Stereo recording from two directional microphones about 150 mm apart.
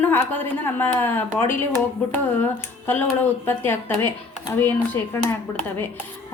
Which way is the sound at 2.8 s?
15° left (ahead or behind).